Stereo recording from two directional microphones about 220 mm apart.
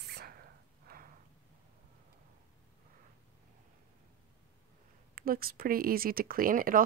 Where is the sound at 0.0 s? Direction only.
45° right (ahead or behind).